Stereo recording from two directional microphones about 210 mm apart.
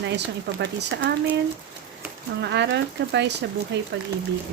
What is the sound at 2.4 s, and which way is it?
Speech, 55° right (ahead or behind).